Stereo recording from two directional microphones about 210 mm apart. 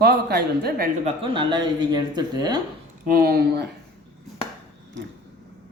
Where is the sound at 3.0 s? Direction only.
45° right (ahead or behind).